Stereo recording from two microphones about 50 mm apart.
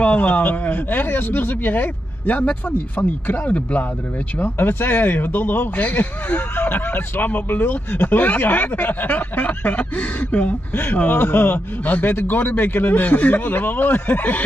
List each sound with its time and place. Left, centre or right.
0.0 s speech: left
4.4 s speech: left
10.8 s speech: left
11.5 s speech: left